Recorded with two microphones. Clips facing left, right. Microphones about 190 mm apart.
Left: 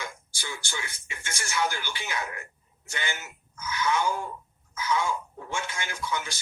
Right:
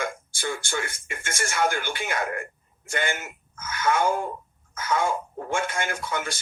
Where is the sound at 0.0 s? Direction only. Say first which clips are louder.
Right 9 dB; 55° right (ahead or behind).